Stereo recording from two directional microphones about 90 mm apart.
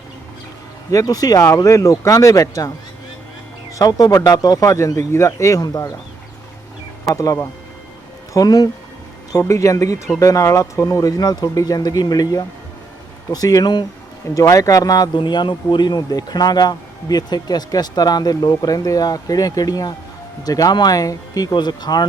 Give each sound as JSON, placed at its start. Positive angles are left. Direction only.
{"t": 0.9, "sound": "speech", "side_deg": 40}
{"t": 1.4, "sound": "speech", "side_deg": 35}
{"t": 3.8, "sound": "speech", "side_deg": 40}
{"t": 7.1, "sound": "speech", "side_deg": 40}
{"t": 9.3, "sound": "speech", "side_deg": 35}
{"t": 14.3, "sound": "speech", "side_deg": 40}
{"t": 15.1, "sound": "speech", "side_deg": 60}